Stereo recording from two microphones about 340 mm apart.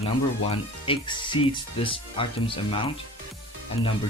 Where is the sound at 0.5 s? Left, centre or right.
Centre.